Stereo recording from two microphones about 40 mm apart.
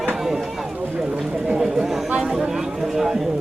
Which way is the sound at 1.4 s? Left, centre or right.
Centre.